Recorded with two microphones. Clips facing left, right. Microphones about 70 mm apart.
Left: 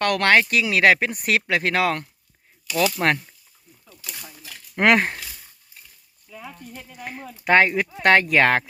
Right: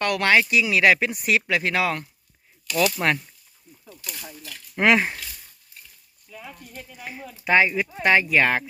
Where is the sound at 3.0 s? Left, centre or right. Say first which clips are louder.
Left 4 dB; left.